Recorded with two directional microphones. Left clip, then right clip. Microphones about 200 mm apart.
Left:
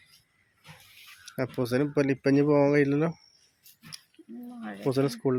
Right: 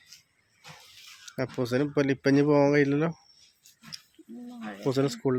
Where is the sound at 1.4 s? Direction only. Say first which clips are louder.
Even; 5° left (ahead or behind).